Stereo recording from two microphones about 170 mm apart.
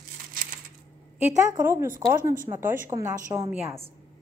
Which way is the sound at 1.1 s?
15° right (ahead or behind).